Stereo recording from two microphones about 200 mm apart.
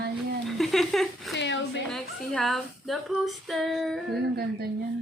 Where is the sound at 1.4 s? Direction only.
65° left (ahead or behind).